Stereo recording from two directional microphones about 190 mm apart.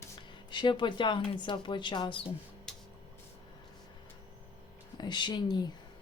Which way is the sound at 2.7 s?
5° left (ahead or behind).